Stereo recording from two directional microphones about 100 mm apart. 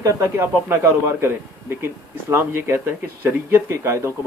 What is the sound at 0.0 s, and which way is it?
Speech, 25° right (ahead or behind).